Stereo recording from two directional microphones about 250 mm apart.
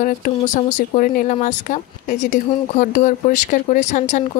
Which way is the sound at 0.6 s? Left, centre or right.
Left.